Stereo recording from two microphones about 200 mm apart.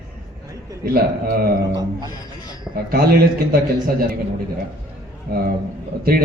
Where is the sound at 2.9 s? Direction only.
50° right (ahead or behind).